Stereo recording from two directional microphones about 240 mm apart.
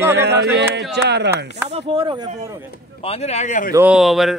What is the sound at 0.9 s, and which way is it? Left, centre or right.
Speech, right.